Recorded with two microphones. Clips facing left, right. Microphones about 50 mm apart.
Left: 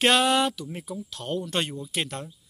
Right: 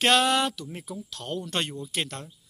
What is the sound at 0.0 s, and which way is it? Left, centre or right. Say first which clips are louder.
Speech: left 1 dB; centre.